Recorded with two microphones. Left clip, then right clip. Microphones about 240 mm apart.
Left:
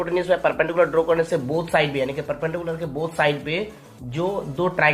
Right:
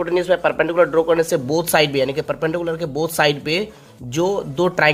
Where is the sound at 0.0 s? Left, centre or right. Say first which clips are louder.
Right 3 dB; right.